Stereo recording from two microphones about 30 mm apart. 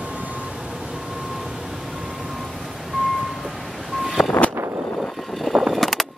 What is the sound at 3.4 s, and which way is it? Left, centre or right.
Vehicle, centre.